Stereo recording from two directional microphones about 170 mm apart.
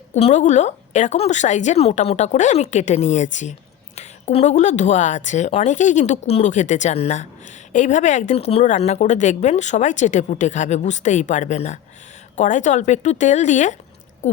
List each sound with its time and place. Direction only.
0.1 s speech: 40° left (ahead or behind)